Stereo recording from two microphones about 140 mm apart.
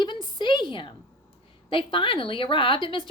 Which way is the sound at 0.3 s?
35° left (ahead or behind).